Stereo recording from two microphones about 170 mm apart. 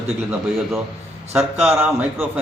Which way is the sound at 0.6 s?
Centre (ahead or behind).